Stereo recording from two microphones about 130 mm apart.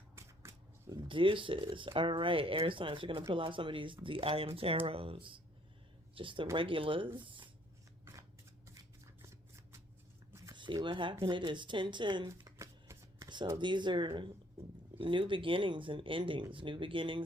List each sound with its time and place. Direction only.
0.2 s shuffling cards: 25° right (ahead or behind)
1.0 s speech: 40° right (ahead or behind)
10.5 s speech: 35° right (ahead or behind)
12.3 s shuffling cards: 25° right (ahead or behind)
13.2 s a sound: 35° right (ahead or behind)
13.6 s speech: 35° right (ahead or behind)